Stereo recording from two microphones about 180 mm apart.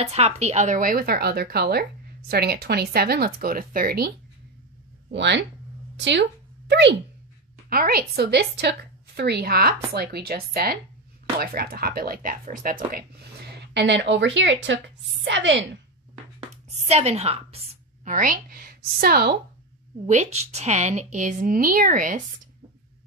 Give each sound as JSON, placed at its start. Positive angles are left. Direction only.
{"t": 0.0, "sound": "speech", "side_deg": -35}
{"t": 5.1, "sound": "speech", "side_deg": -75}
{"t": 7.7, "sound": "a woman's voice", "side_deg": -55}
{"t": 16.3, "sound": "speech", "side_deg": -35}
{"t": 18.0, "sound": "a woman's voice", "side_deg": -50}
{"t": 20.1, "sound": "a woman's voice", "side_deg": -40}